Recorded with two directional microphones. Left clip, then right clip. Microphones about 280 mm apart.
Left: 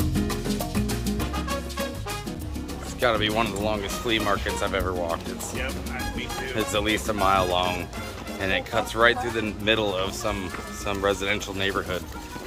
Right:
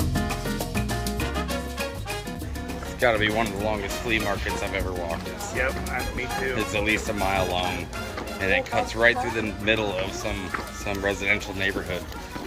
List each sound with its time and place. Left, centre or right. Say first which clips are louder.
3.0 s speech: right 1 dB; centre
6.6 s speech: left 2 dB; centre